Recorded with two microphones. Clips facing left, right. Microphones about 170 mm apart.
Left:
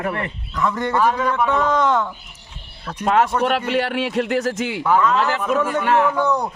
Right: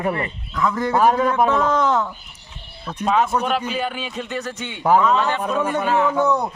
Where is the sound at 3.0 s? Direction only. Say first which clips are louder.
Left 2 dB; 70° left (ahead or behind).